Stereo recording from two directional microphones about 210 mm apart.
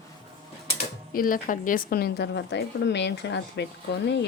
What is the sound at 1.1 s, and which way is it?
A woman's voice, 40° left (ahead or behind).